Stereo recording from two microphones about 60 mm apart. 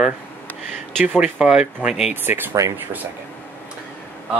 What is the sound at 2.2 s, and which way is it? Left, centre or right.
Speech, right.